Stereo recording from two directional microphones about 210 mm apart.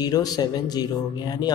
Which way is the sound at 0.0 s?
20° left (ahead or behind).